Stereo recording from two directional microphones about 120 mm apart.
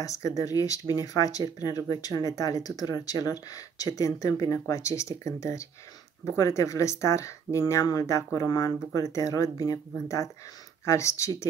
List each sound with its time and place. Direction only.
0.0 s speech: 25° left (ahead or behind)